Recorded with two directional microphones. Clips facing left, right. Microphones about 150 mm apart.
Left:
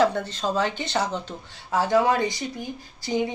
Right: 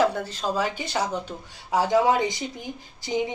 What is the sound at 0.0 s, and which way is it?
Speech, 5° right (ahead or behind).